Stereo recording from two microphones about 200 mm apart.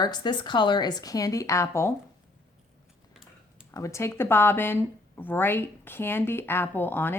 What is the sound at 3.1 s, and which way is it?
Typing, centre (ahead or behind).